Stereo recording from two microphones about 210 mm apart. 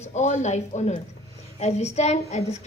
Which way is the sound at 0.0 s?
35° left (ahead or behind).